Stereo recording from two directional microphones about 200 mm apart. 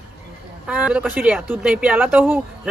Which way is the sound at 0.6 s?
5° right (ahead or behind).